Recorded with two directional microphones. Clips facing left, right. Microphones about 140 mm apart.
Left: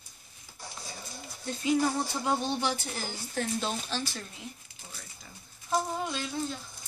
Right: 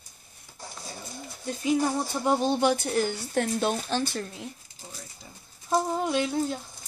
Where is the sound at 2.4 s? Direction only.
50° right (ahead or behind).